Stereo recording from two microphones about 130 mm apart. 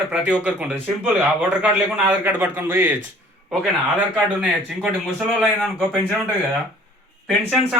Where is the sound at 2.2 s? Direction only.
15° right (ahead or behind).